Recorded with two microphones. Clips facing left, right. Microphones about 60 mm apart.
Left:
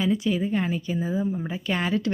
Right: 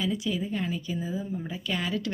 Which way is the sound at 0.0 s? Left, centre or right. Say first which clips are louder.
Left 5 dB; left.